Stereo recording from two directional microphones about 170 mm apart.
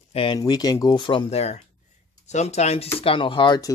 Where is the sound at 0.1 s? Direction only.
30° left (ahead or behind).